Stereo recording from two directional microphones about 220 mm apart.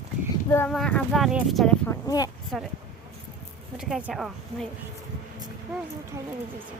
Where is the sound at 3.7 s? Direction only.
Centre (ahead or behind).